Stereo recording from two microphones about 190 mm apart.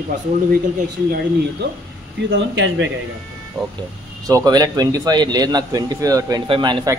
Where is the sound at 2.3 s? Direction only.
80° right.